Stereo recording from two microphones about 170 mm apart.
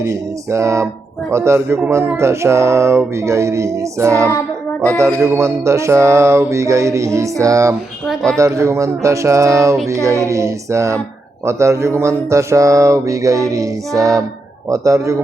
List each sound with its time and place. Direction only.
0.0 s speech: 15° right (ahead or behind)
8.0 s speech: centre (ahead or behind)
8.4 s speech: 20° right (ahead or behind)
11.4 s mantra: 15° right (ahead or behind)
14.7 s speech: 20° right (ahead or behind)